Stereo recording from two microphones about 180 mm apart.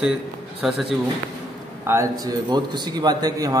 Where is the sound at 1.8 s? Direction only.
15° right (ahead or behind).